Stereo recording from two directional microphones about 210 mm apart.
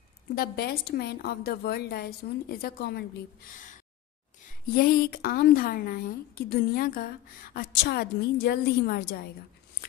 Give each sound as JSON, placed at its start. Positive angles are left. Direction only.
{"t": 0.4, "sound": "a woman's voice", "side_deg": 50}
{"t": 4.7, "sound": "a woman's voice", "side_deg": 45}